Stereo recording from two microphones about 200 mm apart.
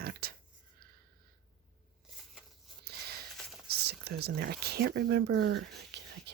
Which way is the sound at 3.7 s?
55° right (ahead or behind).